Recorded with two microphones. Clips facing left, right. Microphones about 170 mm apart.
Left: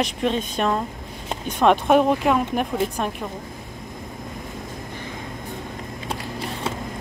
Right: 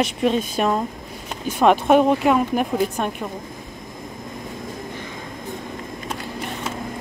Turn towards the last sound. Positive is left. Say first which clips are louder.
# even
turn(degrees=30)  # may be behind; listen again after turning